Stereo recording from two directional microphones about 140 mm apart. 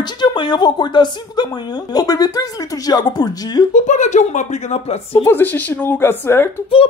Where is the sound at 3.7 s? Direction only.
60° left (ahead or behind).